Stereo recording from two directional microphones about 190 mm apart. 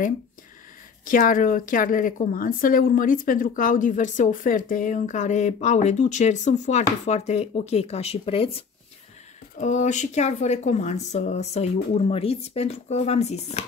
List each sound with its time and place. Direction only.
1.0 s a woman's voice: 45° left (ahead or behind)
9.6 s a woman's voice: 40° left (ahead or behind)